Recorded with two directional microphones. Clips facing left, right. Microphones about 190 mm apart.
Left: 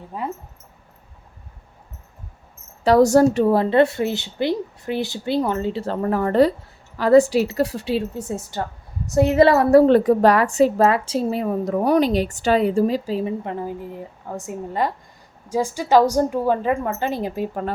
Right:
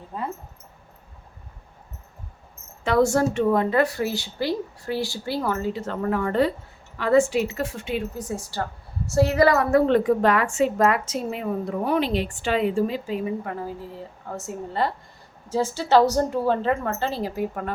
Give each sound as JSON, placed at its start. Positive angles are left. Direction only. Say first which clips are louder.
{"t": 2.8, "sound": "a woman's voice", "louder": "left 6 dB", "side_deg": 40}